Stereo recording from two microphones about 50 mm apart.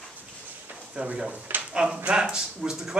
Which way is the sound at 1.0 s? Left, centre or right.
Right.